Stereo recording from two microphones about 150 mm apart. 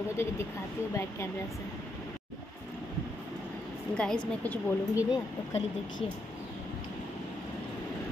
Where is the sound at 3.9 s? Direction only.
5° left (ahead or behind).